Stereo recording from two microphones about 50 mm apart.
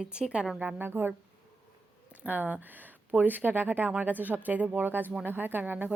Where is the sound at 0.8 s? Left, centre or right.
Right.